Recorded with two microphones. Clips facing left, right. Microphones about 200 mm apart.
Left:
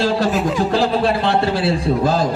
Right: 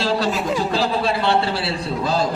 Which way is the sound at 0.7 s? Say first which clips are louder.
Left 4 dB; 50° left (ahead or behind).